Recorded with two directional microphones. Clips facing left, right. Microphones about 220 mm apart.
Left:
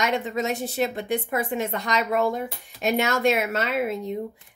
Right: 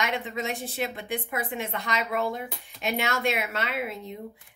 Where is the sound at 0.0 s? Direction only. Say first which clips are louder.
Left 5 dB; 45° left (ahead or behind).